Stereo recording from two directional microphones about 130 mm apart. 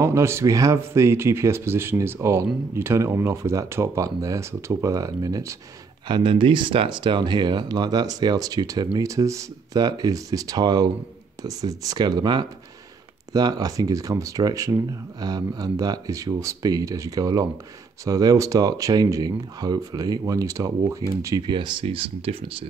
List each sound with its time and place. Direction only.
0.0 s speech: 20° right (ahead or behind)
6.0 s speech: 40° right (ahead or behind)
21.4 s speech: 35° right (ahead or behind)